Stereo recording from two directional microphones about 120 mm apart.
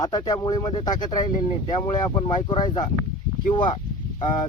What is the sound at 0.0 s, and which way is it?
Speech, 35° left (ahead or behind).